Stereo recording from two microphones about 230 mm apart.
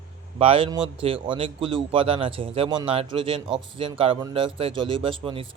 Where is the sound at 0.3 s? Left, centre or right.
Right.